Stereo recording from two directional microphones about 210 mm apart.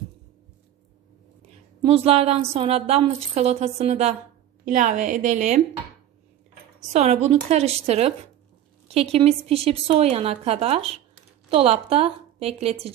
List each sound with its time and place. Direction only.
1.8 s a woman's voice: 30° right (ahead or behind)
6.9 s a woman's voice: 30° right (ahead or behind)